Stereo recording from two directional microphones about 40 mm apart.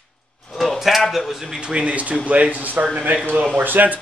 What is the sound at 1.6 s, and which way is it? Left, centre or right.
Speech, right.